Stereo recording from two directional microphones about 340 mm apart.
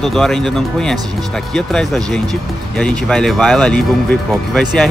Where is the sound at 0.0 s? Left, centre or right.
Centre.